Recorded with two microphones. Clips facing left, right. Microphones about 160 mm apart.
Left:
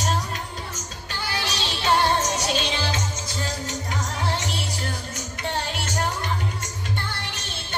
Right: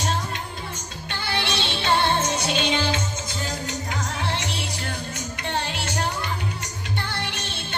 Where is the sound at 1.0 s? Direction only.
40° left (ahead or behind).